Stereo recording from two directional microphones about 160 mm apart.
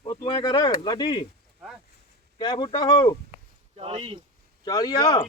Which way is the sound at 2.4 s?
30° left (ahead or behind).